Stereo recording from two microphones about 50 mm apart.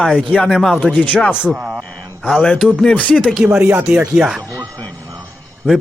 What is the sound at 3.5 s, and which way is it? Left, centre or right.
Speech, right.